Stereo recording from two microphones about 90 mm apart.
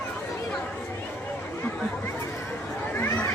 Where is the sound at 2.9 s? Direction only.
25° left (ahead or behind).